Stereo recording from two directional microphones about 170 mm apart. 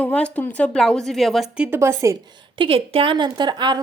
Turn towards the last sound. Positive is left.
turn(degrees=-25)  # may be behind; listen again after turning